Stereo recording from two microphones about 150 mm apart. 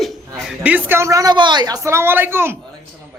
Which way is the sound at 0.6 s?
10° right (ahead or behind).